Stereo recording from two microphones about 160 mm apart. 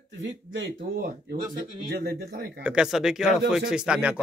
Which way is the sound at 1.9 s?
75° right (ahead or behind).